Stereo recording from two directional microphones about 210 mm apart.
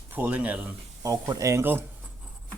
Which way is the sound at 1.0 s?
15° right (ahead or behind).